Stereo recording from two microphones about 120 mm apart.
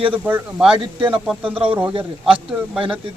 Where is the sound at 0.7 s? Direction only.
45° right (ahead or behind).